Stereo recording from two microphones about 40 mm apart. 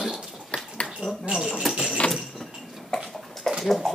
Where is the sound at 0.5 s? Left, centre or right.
Left.